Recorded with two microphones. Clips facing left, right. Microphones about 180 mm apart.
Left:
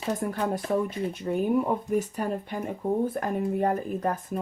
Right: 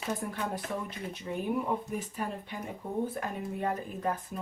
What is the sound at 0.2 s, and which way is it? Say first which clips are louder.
Speech: left 7 dB; 45° left (ahead or behind).